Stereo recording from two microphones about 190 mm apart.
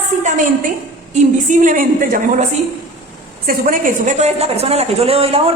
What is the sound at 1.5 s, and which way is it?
Speech, 40° right (ahead or behind).